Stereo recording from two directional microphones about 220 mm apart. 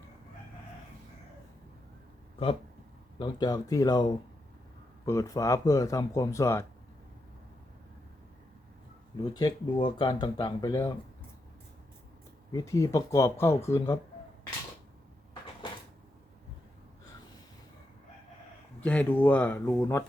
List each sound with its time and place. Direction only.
3.2 s speech: 20° left (ahead or behind)
9.3 s speech: 20° left (ahead or behind)
12.5 s speech: 15° left (ahead or behind)
18.8 s speech: 5° left (ahead or behind)